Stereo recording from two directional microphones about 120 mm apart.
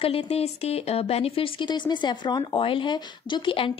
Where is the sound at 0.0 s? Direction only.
50° left (ahead or behind).